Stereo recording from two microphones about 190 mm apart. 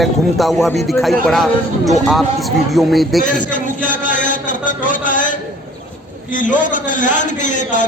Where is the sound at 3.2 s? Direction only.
45° left (ahead or behind).